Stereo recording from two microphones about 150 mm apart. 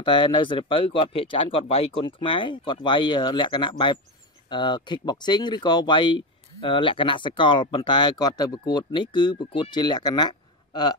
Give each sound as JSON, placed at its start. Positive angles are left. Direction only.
{"t": 0.0, "sound": "speech", "side_deg": 30}